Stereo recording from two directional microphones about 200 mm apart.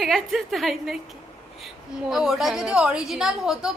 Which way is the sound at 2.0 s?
Centre (ahead or behind).